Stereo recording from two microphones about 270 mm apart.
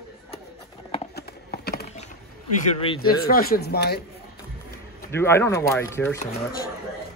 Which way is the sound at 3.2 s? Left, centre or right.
Left.